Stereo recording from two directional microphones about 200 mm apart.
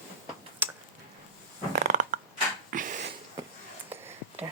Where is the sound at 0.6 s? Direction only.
10° right (ahead or behind).